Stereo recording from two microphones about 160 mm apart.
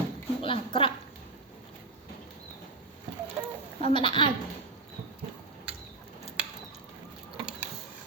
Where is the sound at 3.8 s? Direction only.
30° left (ahead or behind).